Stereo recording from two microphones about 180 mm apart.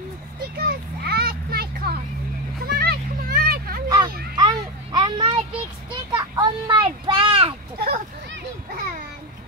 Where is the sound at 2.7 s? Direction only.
60° right (ahead or behind).